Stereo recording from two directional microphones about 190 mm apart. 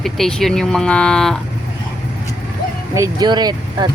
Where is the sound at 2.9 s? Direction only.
20° right (ahead or behind).